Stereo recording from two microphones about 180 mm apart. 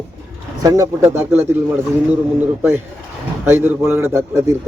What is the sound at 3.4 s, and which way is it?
A man's voice, 10° right (ahead or behind).